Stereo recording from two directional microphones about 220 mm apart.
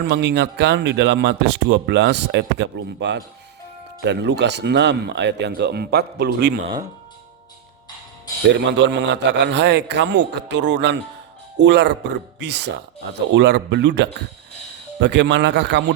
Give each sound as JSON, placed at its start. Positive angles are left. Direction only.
{"t": 0.0, "sound": "speech", "side_deg": -50}
{"t": 8.7, "sound": "speech", "side_deg": -50}